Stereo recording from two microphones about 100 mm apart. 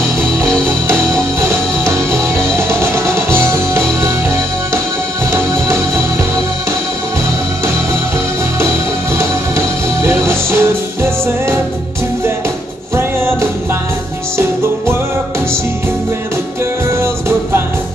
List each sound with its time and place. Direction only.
1.4 s music: 25° right (ahead or behind)
5.3 s music: 25° right (ahead or behind)
10.0 s music: 25° right (ahead or behind)
12.9 s music: 25° right (ahead or behind)